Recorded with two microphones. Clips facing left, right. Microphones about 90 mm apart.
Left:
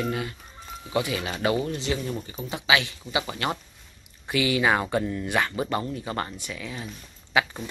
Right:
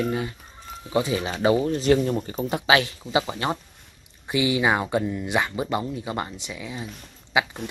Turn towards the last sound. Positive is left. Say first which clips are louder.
# right 1 dB
turn(degrees=-20)  # may be behind; listen again after turning